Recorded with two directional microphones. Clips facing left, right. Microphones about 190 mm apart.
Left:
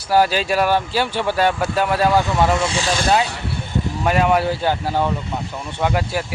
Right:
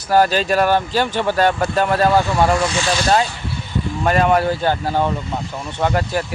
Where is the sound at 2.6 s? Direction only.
30° left (ahead or behind).